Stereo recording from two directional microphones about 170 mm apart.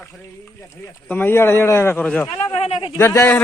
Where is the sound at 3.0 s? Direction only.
15° left (ahead or behind).